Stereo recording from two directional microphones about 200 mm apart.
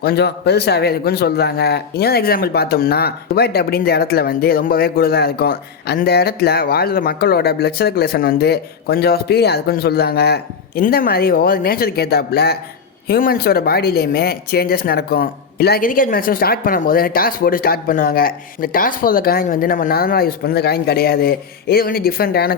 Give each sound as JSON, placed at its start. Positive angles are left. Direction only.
{"t": 0.0, "sound": "speech", "side_deg": 55}